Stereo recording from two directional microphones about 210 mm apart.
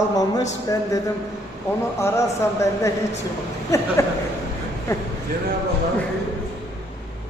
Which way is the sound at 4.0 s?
15° left (ahead or behind).